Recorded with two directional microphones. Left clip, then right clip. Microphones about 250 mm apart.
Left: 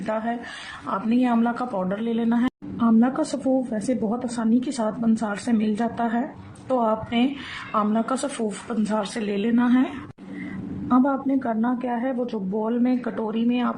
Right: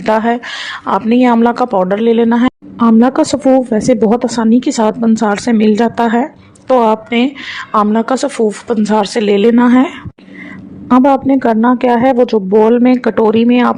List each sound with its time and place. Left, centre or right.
0.0 s a woman's voice: right